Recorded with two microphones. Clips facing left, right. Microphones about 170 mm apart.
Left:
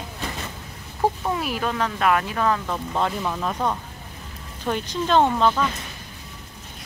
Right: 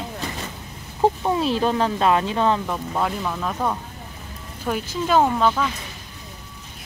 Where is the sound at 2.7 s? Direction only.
5° right (ahead or behind).